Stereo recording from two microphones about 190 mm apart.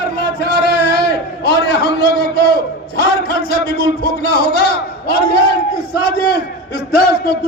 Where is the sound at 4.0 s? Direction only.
55° left (ahead or behind).